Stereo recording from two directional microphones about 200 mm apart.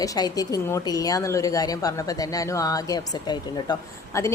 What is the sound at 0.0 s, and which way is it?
A woman's voice, 15° left (ahead or behind).